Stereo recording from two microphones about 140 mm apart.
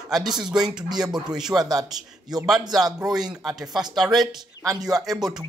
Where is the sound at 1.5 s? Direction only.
25° right (ahead or behind).